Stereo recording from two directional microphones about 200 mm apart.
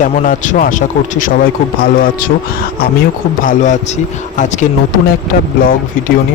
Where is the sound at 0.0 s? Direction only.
40° left (ahead or behind).